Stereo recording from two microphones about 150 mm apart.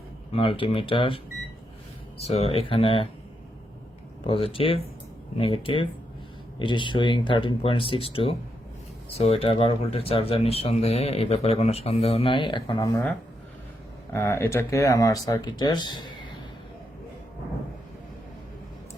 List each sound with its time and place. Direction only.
0.3 s speech: 35° left (ahead or behind)
2.2 s speech: 45° left (ahead or behind)
4.3 s speech: 40° left (ahead or behind)
14.1 s speech: 20° left (ahead or behind)